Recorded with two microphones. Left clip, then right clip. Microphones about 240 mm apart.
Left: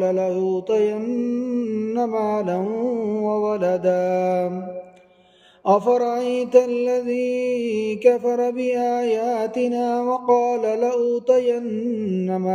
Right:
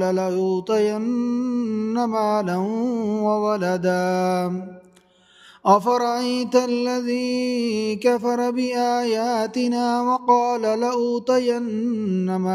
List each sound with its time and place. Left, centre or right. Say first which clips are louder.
0.0 s music: left 1 dB; right
2.0 s music: right 1 dB; right
3.3 s mantra: even; right
5.7 s music: even; right
8.0 s music: left 3 dB; right